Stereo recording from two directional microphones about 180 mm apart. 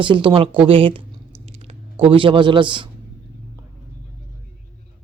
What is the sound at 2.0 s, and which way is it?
Speech, 30° right (ahead or behind).